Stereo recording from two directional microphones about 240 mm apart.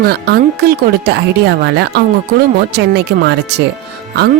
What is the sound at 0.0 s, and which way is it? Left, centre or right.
Speech, right.